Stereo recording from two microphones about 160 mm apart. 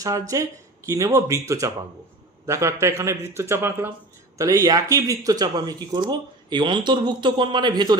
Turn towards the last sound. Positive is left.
turn(degrees=-25)  # may be behind; listen again after turning